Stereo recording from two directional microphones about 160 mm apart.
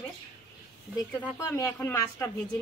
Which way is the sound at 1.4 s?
15° left (ahead or behind).